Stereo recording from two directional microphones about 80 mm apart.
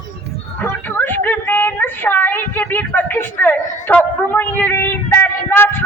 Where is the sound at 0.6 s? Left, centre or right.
Left.